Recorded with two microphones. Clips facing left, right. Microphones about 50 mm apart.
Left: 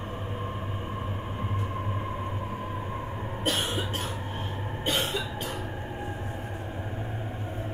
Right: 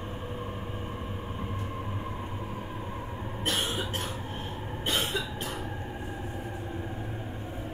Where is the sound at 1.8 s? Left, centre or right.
Centre.